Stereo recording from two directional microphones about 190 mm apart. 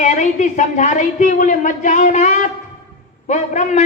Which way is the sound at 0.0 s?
40° left (ahead or behind).